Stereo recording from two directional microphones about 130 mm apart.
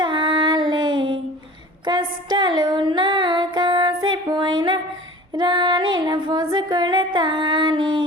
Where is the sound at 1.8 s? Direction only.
35° right (ahead or behind).